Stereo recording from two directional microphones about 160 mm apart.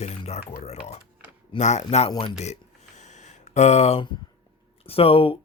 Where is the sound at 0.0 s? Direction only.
40° left (ahead or behind).